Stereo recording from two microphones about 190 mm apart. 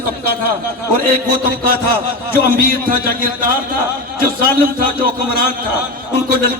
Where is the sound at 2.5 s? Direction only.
50° right (ahead or behind).